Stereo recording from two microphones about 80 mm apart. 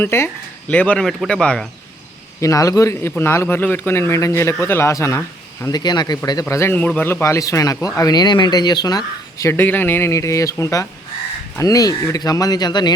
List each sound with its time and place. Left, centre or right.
0.0 s a man's voice: left
0.7 s speech: centre
2.4 s a man's voice: left
5.6 s speech: left
6.5 s a man's voice: left
6.7 s speech: centre; by 9.5 s left
9.5 s speech: left
10.1 s a man's voice: left